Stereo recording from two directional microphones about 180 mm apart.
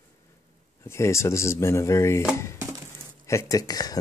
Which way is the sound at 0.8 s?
15° left (ahead or behind).